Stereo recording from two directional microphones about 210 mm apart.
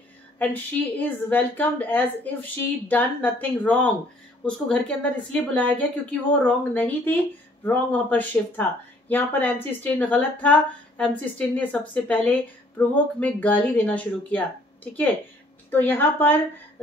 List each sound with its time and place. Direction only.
0.4 s a woman's voice: 10° left (ahead or behind)
15.7 s a woman's voice: 10° left (ahead or behind)